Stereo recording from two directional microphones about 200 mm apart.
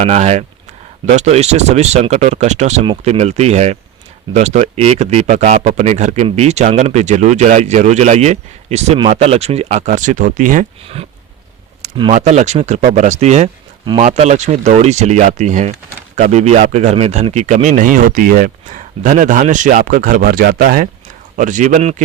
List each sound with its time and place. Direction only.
0.0 s a man's voice: 35° right (ahead or behind)
12.1 s a man's voice: 35° right (ahead or behind)